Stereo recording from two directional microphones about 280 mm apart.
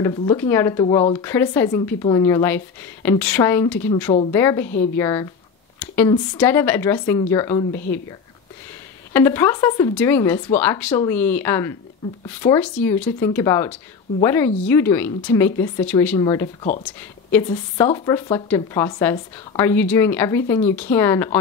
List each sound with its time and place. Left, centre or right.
0.0 s speech: centre
3.9 s a woman's voice: centre
9.1 s speech: centre
17.7 s speech: centre